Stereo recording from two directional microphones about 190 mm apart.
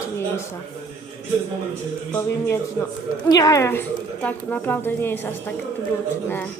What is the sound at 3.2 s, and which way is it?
A woman's voice, 20° left (ahead or behind).